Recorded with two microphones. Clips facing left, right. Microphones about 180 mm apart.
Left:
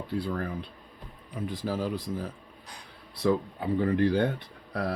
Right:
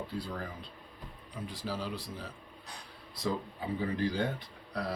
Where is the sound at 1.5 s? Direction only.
50° left (ahead or behind).